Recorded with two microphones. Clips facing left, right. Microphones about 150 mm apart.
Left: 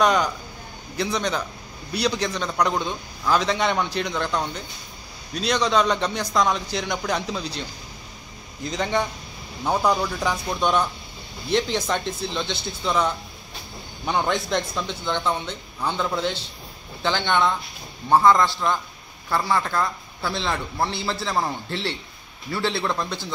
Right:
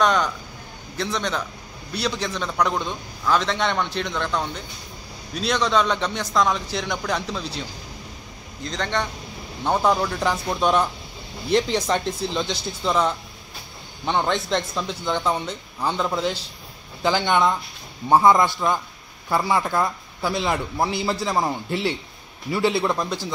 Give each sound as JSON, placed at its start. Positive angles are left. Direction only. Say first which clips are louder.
{"t": 0.0, "sound": "a man's voice", "louder": "even", "side_deg": 5}
{"t": 8.6, "sound": "a man's voice", "louder": "left 2 dB", "side_deg": 10}
{"t": 18.1, "sound": "a man's voice", "louder": "right 1 dB", "side_deg": -15}